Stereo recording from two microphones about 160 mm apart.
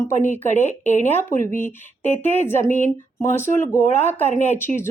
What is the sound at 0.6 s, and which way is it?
Speech, 50° left (ahead or behind).